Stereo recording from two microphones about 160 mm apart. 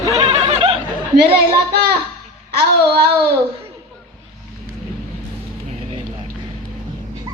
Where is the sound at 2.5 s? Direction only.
80° right.